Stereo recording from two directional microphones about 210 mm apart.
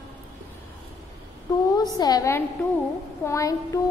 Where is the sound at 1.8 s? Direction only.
20° left (ahead or behind).